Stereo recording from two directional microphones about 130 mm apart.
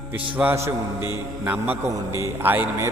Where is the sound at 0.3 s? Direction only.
15° right (ahead or behind).